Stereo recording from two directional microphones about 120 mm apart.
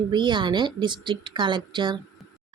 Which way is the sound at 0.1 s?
40° right (ahead or behind).